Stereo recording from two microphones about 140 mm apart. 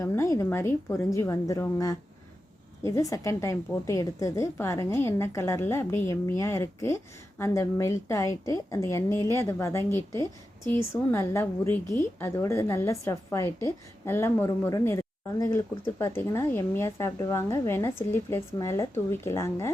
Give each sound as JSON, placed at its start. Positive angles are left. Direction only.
{"t": 0.0, "sound": "speech", "side_deg": 20}